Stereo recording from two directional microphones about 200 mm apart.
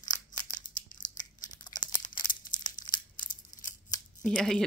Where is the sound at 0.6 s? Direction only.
40° left (ahead or behind).